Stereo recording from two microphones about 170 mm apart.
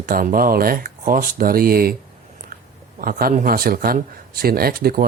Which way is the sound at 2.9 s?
55° right (ahead or behind).